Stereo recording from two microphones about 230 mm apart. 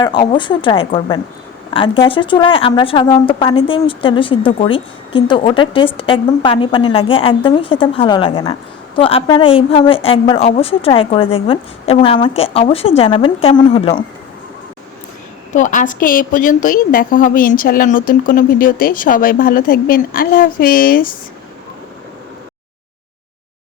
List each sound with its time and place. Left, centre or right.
0.0 s speech: centre
15.5 s a woman's voice: left